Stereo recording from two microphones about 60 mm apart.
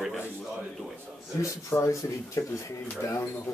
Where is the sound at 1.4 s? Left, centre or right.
Left.